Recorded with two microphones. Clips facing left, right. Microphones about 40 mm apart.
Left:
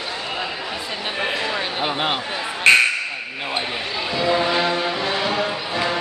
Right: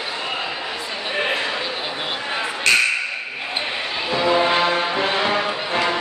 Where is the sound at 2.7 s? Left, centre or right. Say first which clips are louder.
Left 4 dB; left.